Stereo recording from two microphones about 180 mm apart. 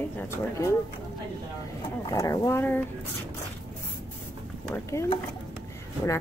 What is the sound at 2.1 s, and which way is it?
Speech, 20° left (ahead or behind).